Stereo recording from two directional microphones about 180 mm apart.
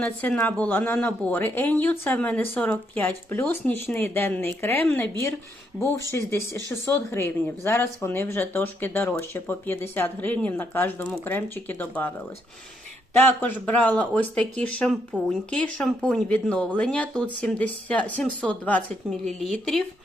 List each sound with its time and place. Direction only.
0.0 s speech: 10° left (ahead or behind)
13.4 s speech: 10° left (ahead or behind)